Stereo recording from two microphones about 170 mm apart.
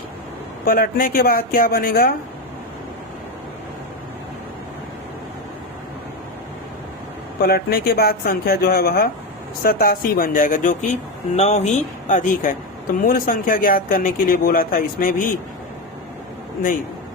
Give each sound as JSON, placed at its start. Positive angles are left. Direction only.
{"t": 0.6, "sound": "speech", "side_deg": 60}
{"t": 7.4, "sound": "speech", "side_deg": 65}